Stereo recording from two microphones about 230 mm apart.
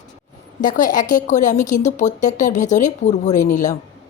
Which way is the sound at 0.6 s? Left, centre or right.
Left.